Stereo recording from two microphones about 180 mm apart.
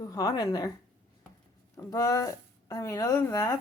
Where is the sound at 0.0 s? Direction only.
20° left (ahead or behind).